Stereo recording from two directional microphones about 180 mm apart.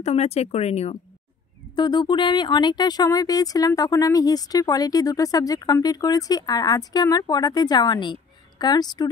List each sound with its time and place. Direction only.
0.0 s speech: 35° left (ahead or behind)
1.8 s speech: 25° left (ahead or behind)